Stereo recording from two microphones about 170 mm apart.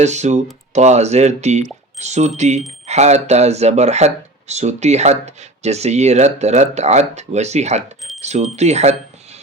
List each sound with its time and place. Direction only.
0.0 s speech: 40° right (ahead or behind)